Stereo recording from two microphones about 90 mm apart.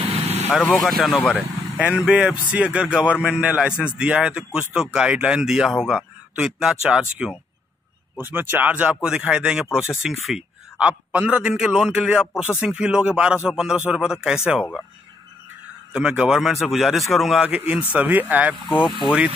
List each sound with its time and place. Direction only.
0.7 s a man's voice: centre (ahead or behind)
1.8 s a man's voice: 10° right (ahead or behind)
8.2 s a man's voice: 20° right (ahead or behind)
15.9 s a man's voice: 10° right (ahead or behind)
18.7 s speech: 65° left (ahead or behind)
19.0 s a man's voice: 10° right (ahead or behind)